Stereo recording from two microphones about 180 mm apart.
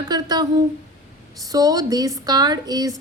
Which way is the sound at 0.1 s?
20° right (ahead or behind).